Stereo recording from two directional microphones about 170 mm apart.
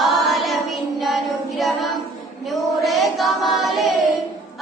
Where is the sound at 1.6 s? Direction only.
Centre (ahead or behind).